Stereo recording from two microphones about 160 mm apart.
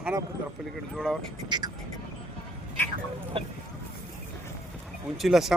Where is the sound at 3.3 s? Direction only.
35° right (ahead or behind).